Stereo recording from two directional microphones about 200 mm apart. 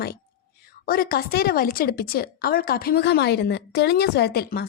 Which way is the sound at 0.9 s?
50° left (ahead or behind).